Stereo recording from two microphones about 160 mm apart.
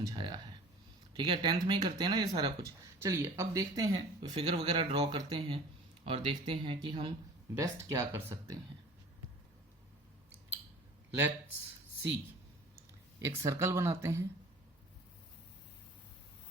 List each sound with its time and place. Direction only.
0.0 s speech: 30° right (ahead or behind)
4.4 s speech: 35° right (ahead or behind)
7.6 s speech: 20° right (ahead or behind)
13.1 s speech: 20° right (ahead or behind)